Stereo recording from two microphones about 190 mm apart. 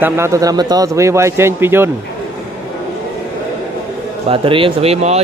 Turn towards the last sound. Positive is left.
turn(degrees=-35)  # may be behind; listen again after turning